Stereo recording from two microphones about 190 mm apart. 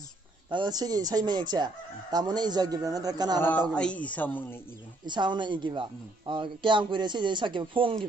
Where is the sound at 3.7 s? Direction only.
5° left (ahead or behind).